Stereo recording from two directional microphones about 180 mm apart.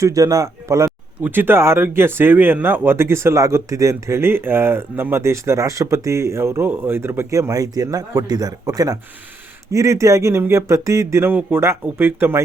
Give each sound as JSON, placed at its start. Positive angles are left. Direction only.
{"t": 0.0, "sound": "speech", "side_deg": -20}